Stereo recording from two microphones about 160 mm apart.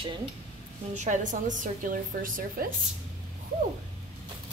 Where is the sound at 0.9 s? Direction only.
50° right (ahead or behind).